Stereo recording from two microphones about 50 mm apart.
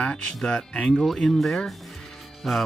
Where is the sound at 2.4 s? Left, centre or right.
Centre.